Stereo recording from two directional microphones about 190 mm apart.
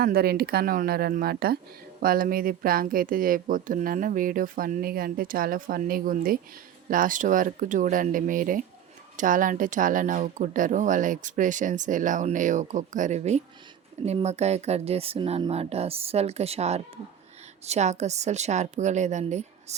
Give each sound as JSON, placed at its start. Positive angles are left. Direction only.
{"t": 0.0, "sound": "speech", "side_deg": -55}